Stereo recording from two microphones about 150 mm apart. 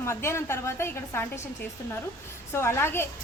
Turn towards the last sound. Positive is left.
turn(degrees=15)  # may be behind; listen again after turning